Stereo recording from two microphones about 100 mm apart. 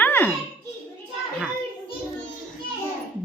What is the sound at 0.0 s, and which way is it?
Children playing, 20° left (ahead or behind).